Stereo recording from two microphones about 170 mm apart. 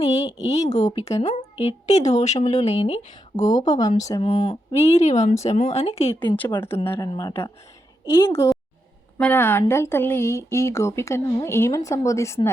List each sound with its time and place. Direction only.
0.0 s a sound: 40° left (ahead or behind)
0.4 s speech: 40° left (ahead or behind)
3.3 s speech: 25° left (ahead or behind)
4.2 s speech: 35° left (ahead or behind)
6.8 s speech: 15° left (ahead or behind)